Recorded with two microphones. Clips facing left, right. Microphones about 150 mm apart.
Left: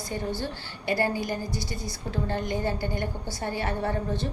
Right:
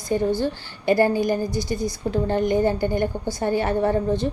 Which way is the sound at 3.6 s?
40° right (ahead or behind).